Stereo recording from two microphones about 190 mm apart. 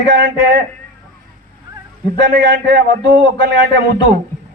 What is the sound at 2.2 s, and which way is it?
A man's voice, 65° right (ahead or behind).